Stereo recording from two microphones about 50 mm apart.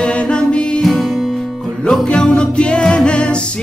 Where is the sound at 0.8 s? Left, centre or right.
Centre.